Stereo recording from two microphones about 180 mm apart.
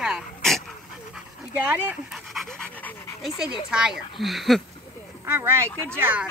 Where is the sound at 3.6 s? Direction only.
5° right (ahead or behind).